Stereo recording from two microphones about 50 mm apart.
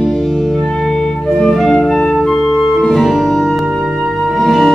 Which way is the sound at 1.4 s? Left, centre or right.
Centre.